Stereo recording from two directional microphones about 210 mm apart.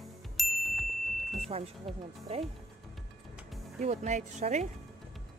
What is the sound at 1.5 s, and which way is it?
Speech, 30° right (ahead or behind).